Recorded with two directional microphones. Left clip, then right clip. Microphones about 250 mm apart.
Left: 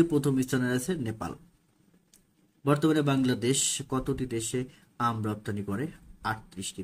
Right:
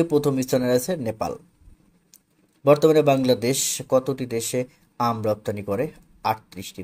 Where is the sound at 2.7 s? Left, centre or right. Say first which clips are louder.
Right 10 dB; centre.